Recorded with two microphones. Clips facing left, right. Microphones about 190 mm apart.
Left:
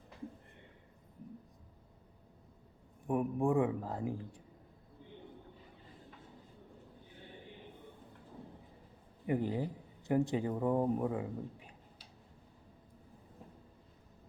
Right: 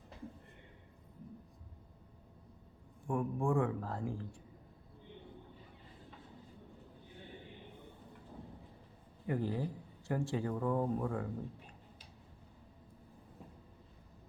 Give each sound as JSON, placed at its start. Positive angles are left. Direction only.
{"t": 3.1, "sound": "speech", "side_deg": 20}
{"t": 9.2, "sound": "speech", "side_deg": 20}